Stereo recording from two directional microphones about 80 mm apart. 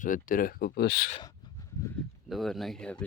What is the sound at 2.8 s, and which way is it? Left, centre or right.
Speech, centre.